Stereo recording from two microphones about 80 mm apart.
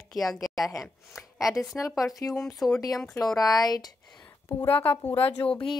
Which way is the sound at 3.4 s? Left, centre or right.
Left.